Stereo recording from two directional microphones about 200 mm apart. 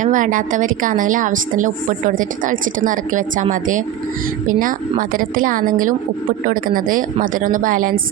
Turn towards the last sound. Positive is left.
turn(degrees=-40)  # may be behind; listen again after turning